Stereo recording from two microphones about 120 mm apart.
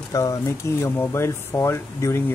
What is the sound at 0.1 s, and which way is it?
Speech, 25° left (ahead or behind).